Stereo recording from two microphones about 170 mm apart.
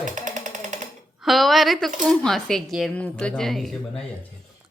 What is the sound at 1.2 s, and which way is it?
Speech, centre (ahead or behind).